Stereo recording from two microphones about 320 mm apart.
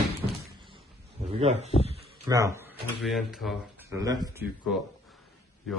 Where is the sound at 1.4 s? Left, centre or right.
Right; by 4.0 s centre.